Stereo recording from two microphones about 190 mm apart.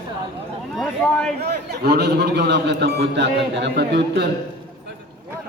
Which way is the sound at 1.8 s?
60° right (ahead or behind).